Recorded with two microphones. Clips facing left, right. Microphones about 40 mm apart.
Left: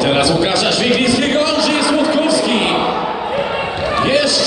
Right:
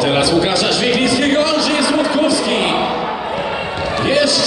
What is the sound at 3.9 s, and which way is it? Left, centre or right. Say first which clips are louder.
Basketball bounce: left 1 dB; centre.